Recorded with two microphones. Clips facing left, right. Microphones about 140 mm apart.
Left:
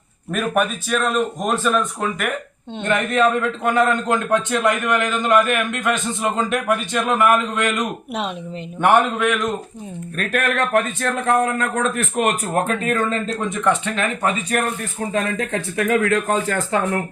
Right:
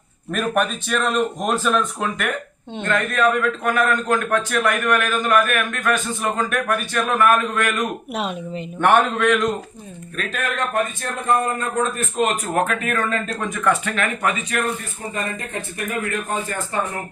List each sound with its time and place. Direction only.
0.3 s speech: centre (ahead or behind)
2.8 s a man's voice: 20° left (ahead or behind); by 9.5 s centre (ahead or behind)
10.3 s a man's voice: 70° left (ahead or behind)
12.6 s a man's voice: 25° left (ahead or behind)
15.1 s speech: 90° left